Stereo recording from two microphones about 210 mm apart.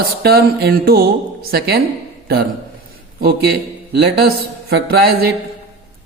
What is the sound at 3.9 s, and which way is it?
Speech, 50° right (ahead or behind).